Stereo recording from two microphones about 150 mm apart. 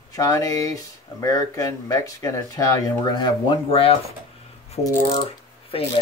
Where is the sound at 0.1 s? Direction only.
20° left (ahead or behind).